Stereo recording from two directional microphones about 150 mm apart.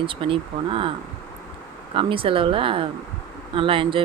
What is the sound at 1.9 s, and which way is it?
Speech, 35° right (ahead or behind).